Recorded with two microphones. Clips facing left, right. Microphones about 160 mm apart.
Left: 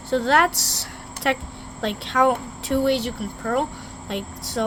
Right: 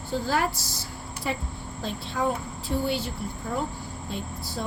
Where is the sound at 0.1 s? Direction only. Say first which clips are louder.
Left 7 dB; 75° left (ahead or behind).